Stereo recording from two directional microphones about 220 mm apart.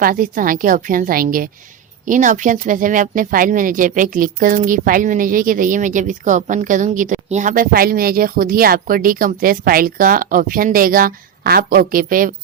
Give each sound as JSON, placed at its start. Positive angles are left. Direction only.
{"t": 0.0, "sound": "speech", "side_deg": -40}